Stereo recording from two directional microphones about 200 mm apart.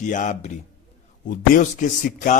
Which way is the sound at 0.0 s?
40° left (ahead or behind).